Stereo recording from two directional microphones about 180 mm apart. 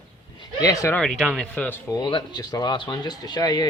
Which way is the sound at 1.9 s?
25° left (ahead or behind).